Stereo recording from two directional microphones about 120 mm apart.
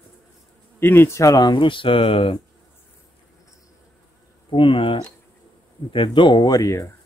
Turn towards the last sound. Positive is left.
turn(degrees=25)  # may be behind; listen again after turning